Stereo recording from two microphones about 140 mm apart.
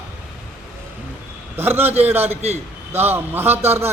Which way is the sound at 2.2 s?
50° right (ahead or behind).